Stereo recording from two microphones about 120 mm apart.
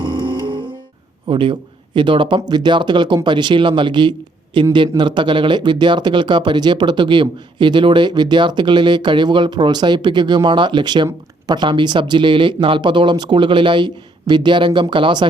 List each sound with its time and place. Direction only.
0.0 s music: 40° right (ahead or behind)
1.3 s speech: 45° right (ahead or behind)